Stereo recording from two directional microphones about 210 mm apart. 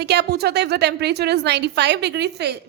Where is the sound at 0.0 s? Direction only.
50° right (ahead or behind).